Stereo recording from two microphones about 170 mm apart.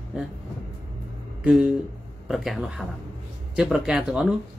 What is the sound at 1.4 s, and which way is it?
Speech, 5° right (ahead or behind).